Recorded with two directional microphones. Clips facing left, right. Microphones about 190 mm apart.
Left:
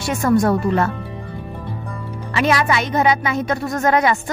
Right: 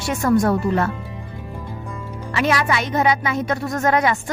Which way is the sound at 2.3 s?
25° left (ahead or behind).